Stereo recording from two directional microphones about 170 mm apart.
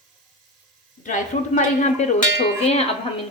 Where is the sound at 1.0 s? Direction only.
50° left (ahead or behind).